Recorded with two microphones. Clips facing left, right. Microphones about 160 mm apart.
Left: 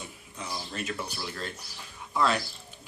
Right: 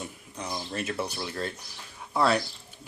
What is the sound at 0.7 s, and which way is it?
Speech, 40° right (ahead or behind).